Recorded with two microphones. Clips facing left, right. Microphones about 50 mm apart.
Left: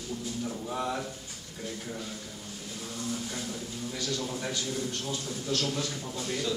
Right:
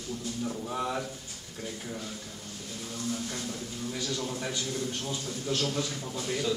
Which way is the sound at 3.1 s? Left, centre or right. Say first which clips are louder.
Right 1 dB; centre.